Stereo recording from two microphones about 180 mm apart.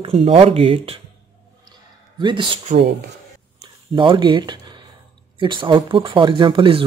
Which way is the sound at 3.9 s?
25° right (ahead or behind).